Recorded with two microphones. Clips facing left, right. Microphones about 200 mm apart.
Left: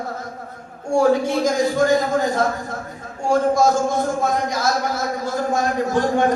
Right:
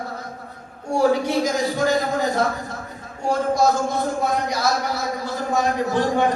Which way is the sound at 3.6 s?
50° left (ahead or behind).